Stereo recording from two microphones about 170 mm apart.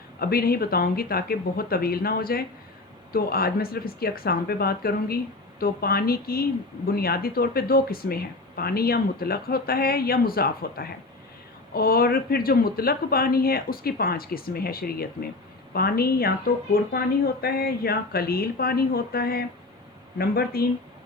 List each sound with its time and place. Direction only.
0.2 s speech: 65° left (ahead or behind)